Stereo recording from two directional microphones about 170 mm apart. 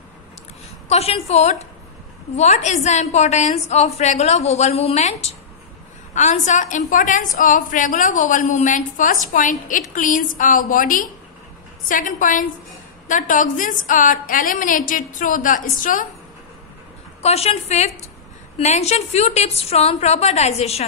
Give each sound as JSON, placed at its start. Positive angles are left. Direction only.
{"t": 0.8, "sound": "a woman's voice", "side_deg": 35}
{"t": 17.2, "sound": "a woman's voice", "side_deg": 35}